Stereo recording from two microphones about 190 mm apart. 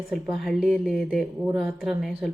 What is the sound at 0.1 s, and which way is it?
Speech, centre (ahead or behind).